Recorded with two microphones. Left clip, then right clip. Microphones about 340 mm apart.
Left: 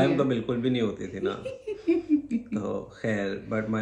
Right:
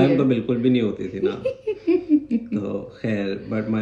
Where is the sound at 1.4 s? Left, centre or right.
Centre.